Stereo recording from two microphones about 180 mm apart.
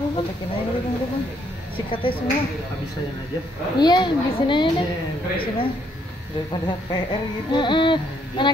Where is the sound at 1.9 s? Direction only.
30° left (ahead or behind).